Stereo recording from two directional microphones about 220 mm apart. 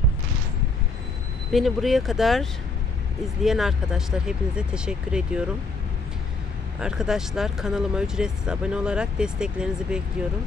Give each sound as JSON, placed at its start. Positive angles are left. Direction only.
{"t": 1.5, "sound": "speech", "side_deg": 0}
{"t": 3.4, "sound": "speech", "side_deg": 0}
{"t": 6.8, "sound": "speech", "side_deg": -5}